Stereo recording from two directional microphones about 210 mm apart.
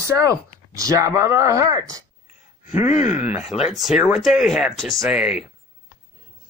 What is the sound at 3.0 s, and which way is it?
Speech, 10° right (ahead or behind).